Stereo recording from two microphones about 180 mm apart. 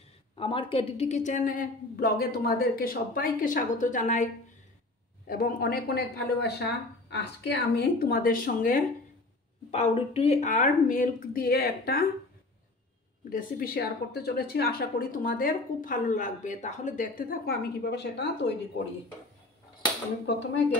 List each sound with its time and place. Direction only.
0.4 s speech: 30° left (ahead or behind)
5.2 s speech: 55° left (ahead or behind)
9.7 s speech: 35° left (ahead or behind); by 12.1 s 55° left (ahead or behind)
13.3 s speech: 55° left (ahead or behind); by 18.5 s 70° left (ahead or behind)